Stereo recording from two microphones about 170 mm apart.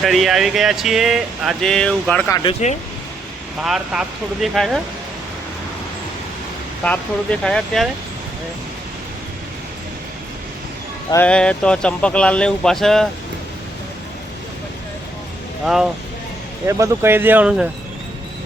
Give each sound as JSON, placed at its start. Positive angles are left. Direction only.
{"t": 0.0, "sound": "speech", "side_deg": 0}
{"t": 2.3, "sound": "speech", "side_deg": 30}
{"t": 3.6, "sound": "speech", "side_deg": 0}
{"t": 6.8, "sound": "speech", "side_deg": 10}
{"t": 11.1, "sound": "speech", "side_deg": 10}
{"t": 15.6, "sound": "speech", "side_deg": 0}
{"t": 16.6, "sound": "speech", "side_deg": -20}